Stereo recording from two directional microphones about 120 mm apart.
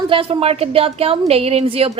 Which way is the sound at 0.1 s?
50° right (ahead or behind).